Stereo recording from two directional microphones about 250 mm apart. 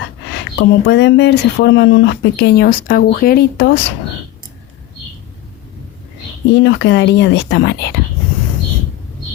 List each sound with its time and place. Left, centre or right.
0.6 s speech: left
6.5 s speech: left